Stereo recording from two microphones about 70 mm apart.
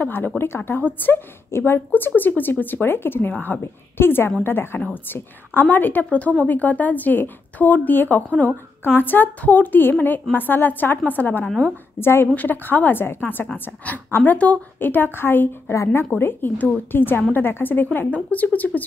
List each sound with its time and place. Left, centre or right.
0.0 s a woman's voice: left
3.6 s a woman's voice: left
11.4 s a woman's voice: centre
12.0 s a woman's voice: left